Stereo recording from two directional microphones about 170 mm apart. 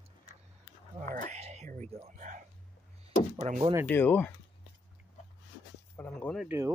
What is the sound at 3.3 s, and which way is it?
Speech, 40° right (ahead or behind).